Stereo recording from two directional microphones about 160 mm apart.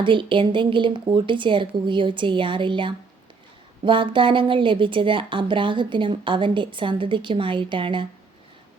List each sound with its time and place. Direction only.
0.0 s a woman's voice: 30° right (ahead or behind)